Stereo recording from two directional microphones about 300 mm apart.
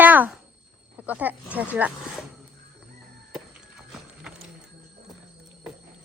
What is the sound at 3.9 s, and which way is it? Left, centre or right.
Clip-clop, centre.